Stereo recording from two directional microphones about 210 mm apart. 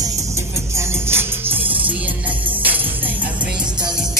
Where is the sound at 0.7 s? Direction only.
10° right (ahead or behind).